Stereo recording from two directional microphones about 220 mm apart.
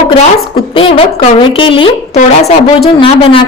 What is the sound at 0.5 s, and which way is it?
A woman's voice, 25° left (ahead or behind).